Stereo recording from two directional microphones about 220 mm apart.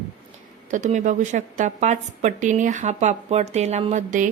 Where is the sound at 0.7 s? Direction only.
35° right (ahead or behind).